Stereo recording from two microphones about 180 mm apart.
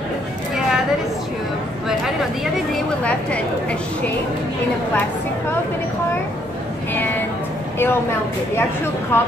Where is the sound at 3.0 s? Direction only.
5° left (ahead or behind).